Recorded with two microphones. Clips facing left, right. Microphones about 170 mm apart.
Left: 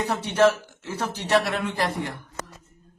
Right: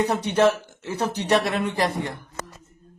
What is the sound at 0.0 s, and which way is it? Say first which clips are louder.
A man's voice: right 1 dB; 15° right (ahead or behind).